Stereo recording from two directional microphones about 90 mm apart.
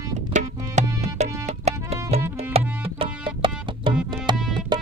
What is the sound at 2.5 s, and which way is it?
Music, 90° right.